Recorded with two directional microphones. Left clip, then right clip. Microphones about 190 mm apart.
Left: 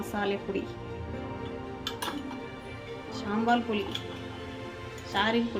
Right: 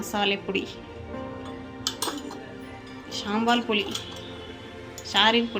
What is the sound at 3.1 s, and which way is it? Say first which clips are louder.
Speech: right 3 dB; 5° right (ahead or behind).